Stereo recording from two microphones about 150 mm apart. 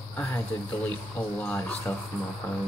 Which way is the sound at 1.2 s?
10° left (ahead or behind).